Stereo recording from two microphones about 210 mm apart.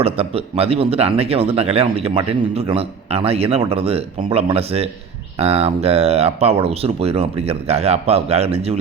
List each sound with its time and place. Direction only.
0.0 s speech: 30° right (ahead or behind)